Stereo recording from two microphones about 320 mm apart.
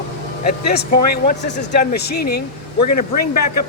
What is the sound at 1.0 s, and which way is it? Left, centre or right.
A man's voice, left.